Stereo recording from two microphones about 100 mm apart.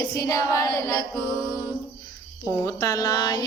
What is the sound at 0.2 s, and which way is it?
Mantra, 35° left (ahead or behind).